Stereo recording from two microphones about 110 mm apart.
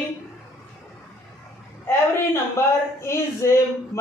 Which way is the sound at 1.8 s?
25° left (ahead or behind).